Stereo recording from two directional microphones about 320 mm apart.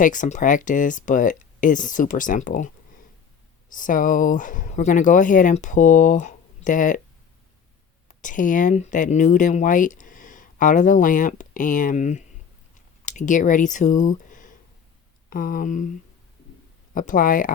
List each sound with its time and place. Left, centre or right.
0.0 s speech: left
8.0 s speech: left
12.7 s a sound: left
15.3 s speech: left
16.9 s speech: left